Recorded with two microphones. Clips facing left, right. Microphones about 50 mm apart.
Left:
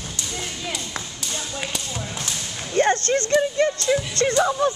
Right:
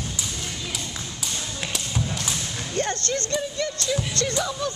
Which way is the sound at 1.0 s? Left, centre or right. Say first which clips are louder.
Left 4 dB; left.